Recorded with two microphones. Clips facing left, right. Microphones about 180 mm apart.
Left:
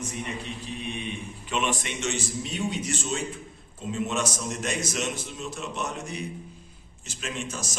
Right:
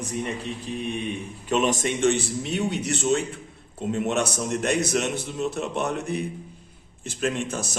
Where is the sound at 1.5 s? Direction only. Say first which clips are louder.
Right 6 dB; 40° right (ahead or behind).